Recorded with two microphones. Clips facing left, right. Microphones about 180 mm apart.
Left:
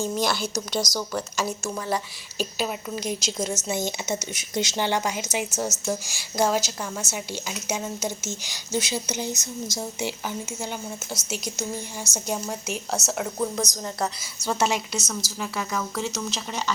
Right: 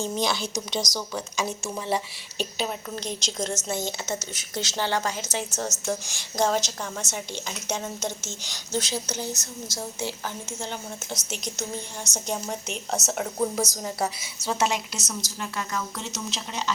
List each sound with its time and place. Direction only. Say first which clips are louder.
0.0 s a woman's voice: left 1 dB; 5° left (ahead or behind)
0.5 s speech: left 2 dB; 20° right (ahead or behind)
1.4 s a woman's voice: right 1 dB; 5° left (ahead or behind)